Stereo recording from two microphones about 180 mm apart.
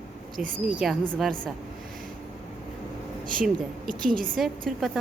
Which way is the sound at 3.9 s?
50° right (ahead or behind).